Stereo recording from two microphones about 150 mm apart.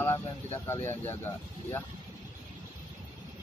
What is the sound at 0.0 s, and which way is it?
Speech, 15° left (ahead or behind).